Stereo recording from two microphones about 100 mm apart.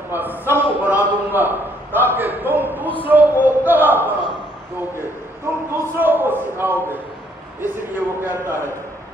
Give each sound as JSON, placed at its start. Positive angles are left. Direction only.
{"t": 0.1, "sound": "a man's voice", "side_deg": -20}
{"t": 5.7, "sound": "a man's voice", "side_deg": -20}